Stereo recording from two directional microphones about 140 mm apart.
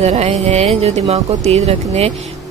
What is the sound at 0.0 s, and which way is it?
Speech, 50° right (ahead or behind).